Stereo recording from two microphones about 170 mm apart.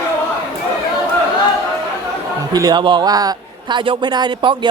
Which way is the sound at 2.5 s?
25° right (ahead or behind).